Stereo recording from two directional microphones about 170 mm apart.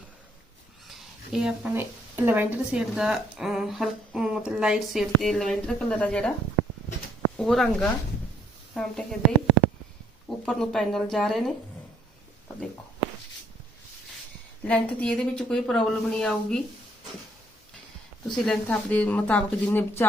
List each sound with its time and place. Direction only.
0.9 s speech: centre (ahead or behind)
7.3 s a woman's voice: centre (ahead or behind)
10.2 s speech: 5° left (ahead or behind)
14.6 s speech: 10° left (ahead or behind)
18.3 s speech: 5° left (ahead or behind)